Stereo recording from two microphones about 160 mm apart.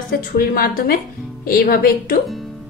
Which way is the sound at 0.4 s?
70° left (ahead or behind).